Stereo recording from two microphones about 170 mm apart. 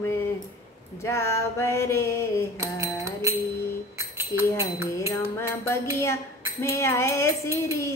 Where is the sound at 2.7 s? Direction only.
15° right (ahead or behind).